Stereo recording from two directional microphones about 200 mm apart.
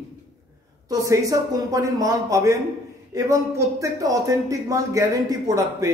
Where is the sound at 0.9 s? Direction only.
15° right (ahead or behind).